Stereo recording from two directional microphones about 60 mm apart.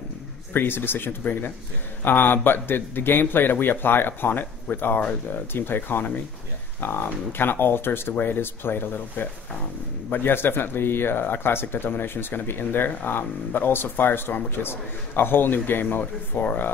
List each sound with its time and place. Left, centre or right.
0.5 s speech: left